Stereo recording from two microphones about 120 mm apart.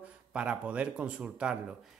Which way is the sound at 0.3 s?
10° right (ahead or behind).